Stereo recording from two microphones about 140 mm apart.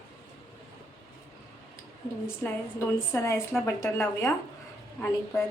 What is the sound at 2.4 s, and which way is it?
A woman's voice, 15° left (ahead or behind).